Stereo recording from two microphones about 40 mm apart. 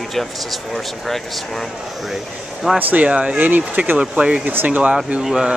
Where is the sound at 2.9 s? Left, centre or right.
Right.